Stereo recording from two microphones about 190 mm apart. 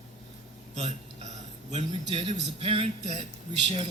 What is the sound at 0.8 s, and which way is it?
Hiccup, 35° right (ahead or behind).